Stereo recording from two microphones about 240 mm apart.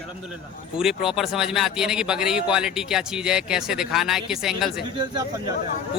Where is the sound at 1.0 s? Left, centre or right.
Centre.